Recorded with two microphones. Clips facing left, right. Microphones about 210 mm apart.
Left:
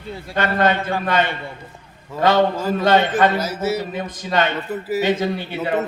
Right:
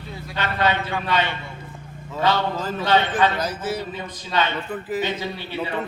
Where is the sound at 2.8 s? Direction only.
45° left (ahead or behind).